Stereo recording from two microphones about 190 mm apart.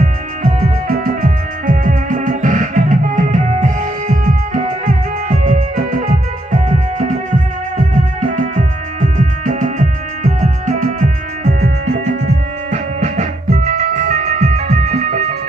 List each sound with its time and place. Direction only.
0.0 s music: 45° right (ahead or behind)
8.4 s music: 40° right (ahead or behind)